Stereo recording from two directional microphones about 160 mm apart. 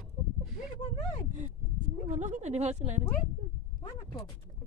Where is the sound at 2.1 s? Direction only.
45° right (ahead or behind).